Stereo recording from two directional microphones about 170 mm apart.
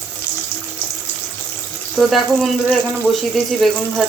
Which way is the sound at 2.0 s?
Centre (ahead or behind).